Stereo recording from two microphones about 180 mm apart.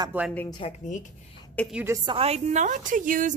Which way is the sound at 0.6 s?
35° left (ahead or behind).